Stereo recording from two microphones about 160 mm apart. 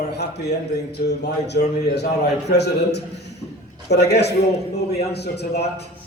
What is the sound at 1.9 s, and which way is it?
A man's voice, 90° left.